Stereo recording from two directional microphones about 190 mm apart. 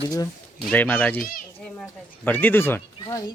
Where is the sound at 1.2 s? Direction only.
45° left (ahead or behind).